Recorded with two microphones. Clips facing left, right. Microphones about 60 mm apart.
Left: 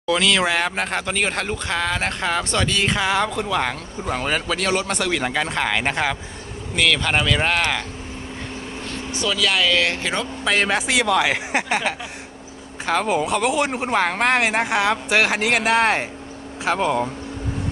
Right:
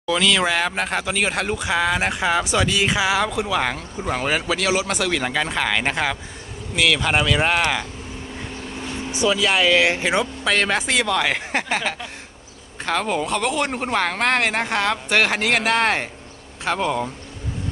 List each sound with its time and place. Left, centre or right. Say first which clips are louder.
0.0 s speech: even; centre
8.8 s speech: right 4 dB; centre
10.4 s speech: even; centre